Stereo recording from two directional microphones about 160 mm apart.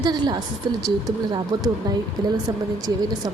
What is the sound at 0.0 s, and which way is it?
Speech, 25° right (ahead or behind).